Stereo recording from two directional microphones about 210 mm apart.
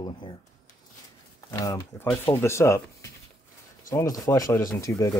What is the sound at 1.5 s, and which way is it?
Speech, 15° left (ahead or behind).